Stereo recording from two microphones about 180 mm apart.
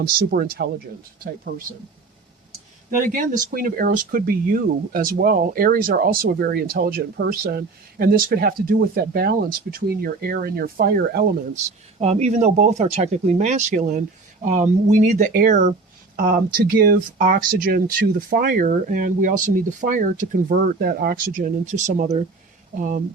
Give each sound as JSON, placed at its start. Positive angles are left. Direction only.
{"t": 0.0, "sound": "speech", "side_deg": -55}
{"t": 3.0, "sound": "speech", "side_deg": -50}
{"t": 11.5, "sound": "speech", "side_deg": -35}